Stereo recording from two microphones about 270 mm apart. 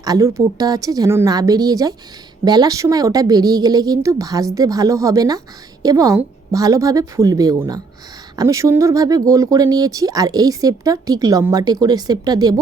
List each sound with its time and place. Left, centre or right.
0.0 s speech: centre